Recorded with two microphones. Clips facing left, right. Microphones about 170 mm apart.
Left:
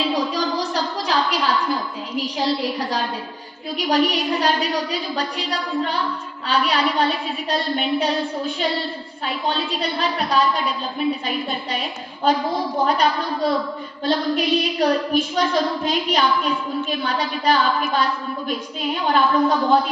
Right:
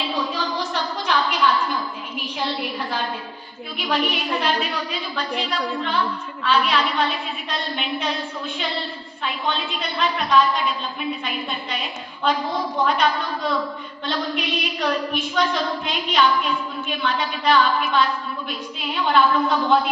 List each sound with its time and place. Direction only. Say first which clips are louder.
0.1 s a sound: left 4 dB; 35° left (ahead or behind)
3.8 s a woman's voice: left 4 dB; 40° left (ahead or behind)
12.8 s a woman's voice: left 1 dB; 40° left (ahead or behind)
19.0 s a woman's voice: left 1 dB; 40° left (ahead or behind)